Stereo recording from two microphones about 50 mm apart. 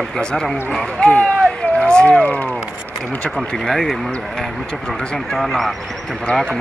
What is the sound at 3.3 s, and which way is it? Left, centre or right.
Speech, centre.